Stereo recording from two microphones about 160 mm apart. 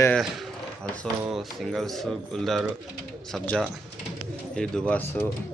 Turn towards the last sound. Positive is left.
turn(degrees=10)  # may be behind; listen again after turning